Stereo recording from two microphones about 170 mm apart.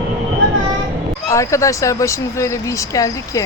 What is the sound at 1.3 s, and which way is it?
Speech, 20° left (ahead or behind).